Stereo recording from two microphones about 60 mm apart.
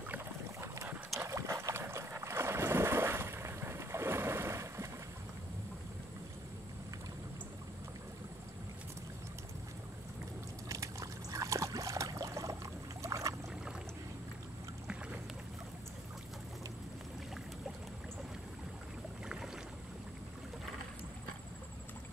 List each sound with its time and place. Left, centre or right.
1.1 s dog: right
1.6 s boat: right
10.7 s trickle: right
13.0 s boat: right
19.2 s boat: centre